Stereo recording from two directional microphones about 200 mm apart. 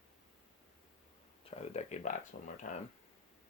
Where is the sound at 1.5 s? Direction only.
30° left (ahead or behind).